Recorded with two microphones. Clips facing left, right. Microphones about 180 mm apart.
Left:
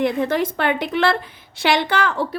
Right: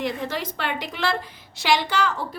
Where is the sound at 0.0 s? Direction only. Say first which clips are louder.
Left 8 dB; 55° left (ahead or behind).